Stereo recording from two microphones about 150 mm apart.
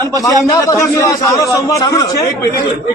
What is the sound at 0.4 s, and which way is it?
A man's voice, 20° left (ahead or behind).